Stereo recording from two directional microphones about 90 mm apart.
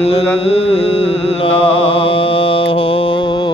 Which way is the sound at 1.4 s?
85° left.